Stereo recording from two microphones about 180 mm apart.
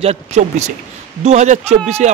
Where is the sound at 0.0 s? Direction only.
35° right (ahead or behind).